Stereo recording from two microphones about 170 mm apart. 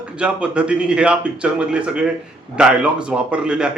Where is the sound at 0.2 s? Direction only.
5° right (ahead or behind).